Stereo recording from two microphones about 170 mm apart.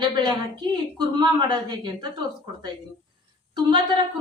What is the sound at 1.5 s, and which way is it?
Speech, 25° right (ahead or behind).